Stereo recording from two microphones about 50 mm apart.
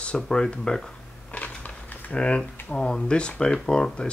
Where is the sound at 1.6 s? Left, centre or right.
Left.